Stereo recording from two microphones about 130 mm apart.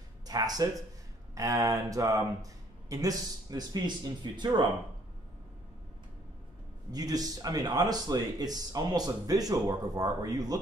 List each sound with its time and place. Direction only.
0.3 s speech: 30° right (ahead or behind)
6.9 s speech: 30° right (ahead or behind)